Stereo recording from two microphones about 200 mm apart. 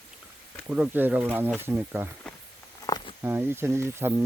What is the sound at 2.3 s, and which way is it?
Walk, 5° left (ahead or behind).